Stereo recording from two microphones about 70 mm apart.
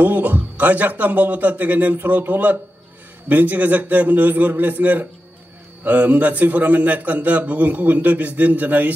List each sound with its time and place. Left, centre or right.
0.0 s a man's voice: right